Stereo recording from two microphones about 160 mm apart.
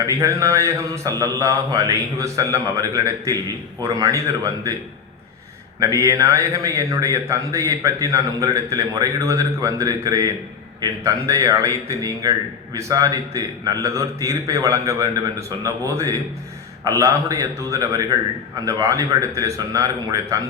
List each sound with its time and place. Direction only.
0.0 s a man's voice: 20° right (ahead or behind)
5.8 s a man's voice: 20° right (ahead or behind)